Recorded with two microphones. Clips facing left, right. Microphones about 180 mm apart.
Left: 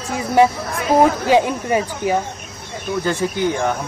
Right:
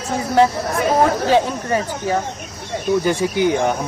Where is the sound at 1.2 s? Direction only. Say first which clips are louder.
Left 1 dB; 15° left (ahead or behind).